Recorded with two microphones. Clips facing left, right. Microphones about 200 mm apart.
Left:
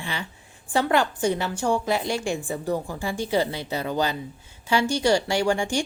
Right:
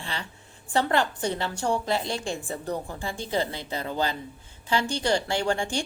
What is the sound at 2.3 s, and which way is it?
A woman's voice, 10° left (ahead or behind).